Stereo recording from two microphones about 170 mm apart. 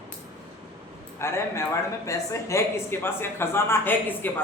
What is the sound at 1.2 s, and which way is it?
Speech, 15° left (ahead or behind).